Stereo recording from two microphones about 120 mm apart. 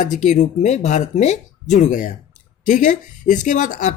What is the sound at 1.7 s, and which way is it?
Speech, 90° left.